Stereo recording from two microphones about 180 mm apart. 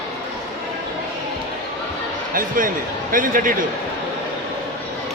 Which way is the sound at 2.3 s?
50° right (ahead or behind).